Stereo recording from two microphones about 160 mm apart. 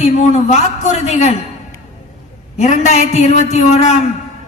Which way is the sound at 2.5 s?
45° left (ahead or behind).